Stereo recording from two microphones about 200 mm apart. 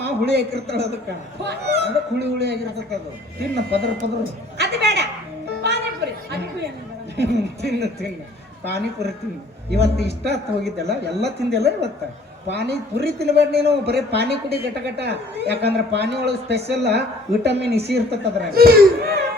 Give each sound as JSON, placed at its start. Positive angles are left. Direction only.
{"t": 0.0, "sound": "a man's voice", "side_deg": -55}
{"t": 4.5, "sound": "a sound", "side_deg": -55}
{"t": 7.2, "sound": "a man's voice", "side_deg": -55}